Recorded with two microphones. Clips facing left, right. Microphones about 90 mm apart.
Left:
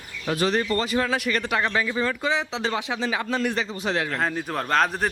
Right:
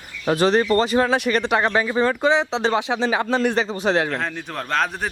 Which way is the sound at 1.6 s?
35° right (ahead or behind).